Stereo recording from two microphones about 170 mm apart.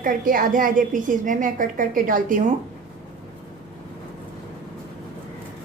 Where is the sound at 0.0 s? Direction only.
55° right (ahead or behind).